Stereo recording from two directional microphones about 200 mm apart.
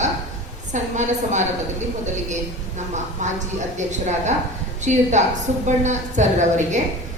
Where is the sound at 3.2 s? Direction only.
35° right (ahead or behind).